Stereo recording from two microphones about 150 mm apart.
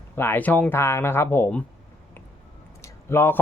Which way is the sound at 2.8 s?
15° left (ahead or behind).